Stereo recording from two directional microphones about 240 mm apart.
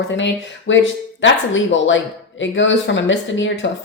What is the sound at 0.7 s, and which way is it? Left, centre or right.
A woman's voice, left.